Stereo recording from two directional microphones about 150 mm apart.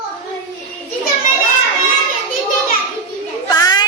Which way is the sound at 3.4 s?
25° left (ahead or behind).